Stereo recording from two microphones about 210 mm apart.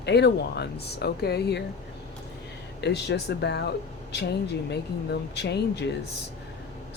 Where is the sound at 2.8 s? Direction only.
55° left (ahead or behind).